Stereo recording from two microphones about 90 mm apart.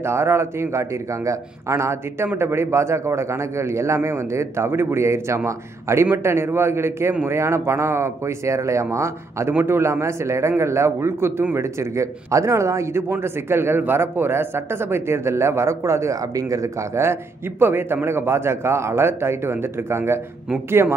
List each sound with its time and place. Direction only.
0.0 s a man's voice: 30° right (ahead or behind)